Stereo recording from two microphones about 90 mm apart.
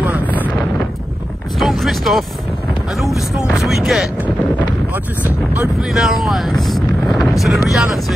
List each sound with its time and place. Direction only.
1.6 s a sound: centre (ahead or behind)
3.0 s speech: centre (ahead or behind)
5.2 s speech: 15° right (ahead or behind)
5.9 s speech: centre (ahead or behind)